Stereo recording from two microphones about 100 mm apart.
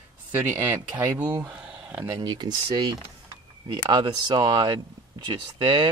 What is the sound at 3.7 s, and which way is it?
Speech, 45° right (ahead or behind).